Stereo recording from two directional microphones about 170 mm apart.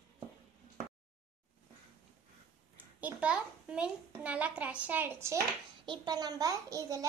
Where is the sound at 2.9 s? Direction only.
5° right (ahead or behind).